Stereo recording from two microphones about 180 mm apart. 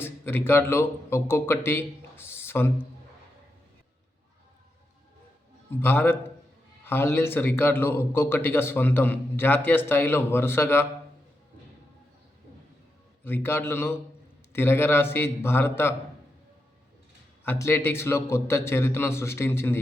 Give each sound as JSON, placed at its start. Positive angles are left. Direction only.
{"t": 0.0, "sound": "speech", "side_deg": 10}
{"t": 5.8, "sound": "a man's voice", "side_deg": 10}
{"t": 13.2, "sound": "a man's voice", "side_deg": 10}
{"t": 17.4, "sound": "a man's voice", "side_deg": 10}